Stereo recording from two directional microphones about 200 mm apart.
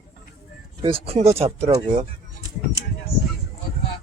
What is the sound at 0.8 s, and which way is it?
Speech, 30° right (ahead or behind).